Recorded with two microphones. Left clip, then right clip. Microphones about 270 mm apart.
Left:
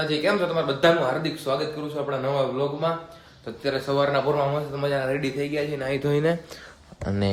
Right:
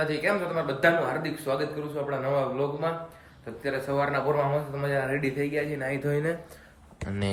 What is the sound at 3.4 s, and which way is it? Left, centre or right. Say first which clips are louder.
Speech: left 4 dB; centre.